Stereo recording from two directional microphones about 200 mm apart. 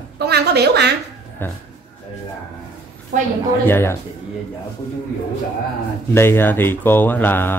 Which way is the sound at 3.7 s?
10° left (ahead or behind).